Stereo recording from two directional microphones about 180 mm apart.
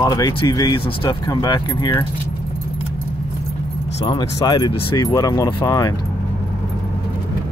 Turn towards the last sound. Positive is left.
turn(degrees=20)  # may be behind; listen again after turning